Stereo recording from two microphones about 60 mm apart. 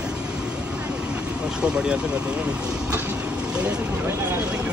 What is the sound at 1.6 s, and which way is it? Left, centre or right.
Speech, centre.